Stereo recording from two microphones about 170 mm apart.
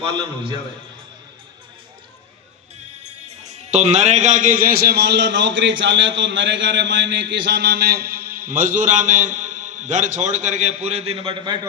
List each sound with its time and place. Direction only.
0.2 s a man's voice: 30° right (ahead or behind)
3.0 s a man's voice: 40° right (ahead or behind)